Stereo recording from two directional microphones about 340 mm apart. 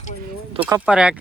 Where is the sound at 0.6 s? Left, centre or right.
Centre.